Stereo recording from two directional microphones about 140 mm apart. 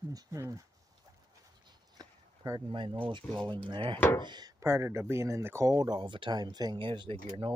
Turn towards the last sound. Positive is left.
turn(degrees=-40)  # may be behind; listen again after turning